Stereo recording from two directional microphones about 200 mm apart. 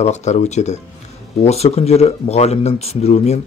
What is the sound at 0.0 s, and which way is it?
Speech, 35° left (ahead or behind).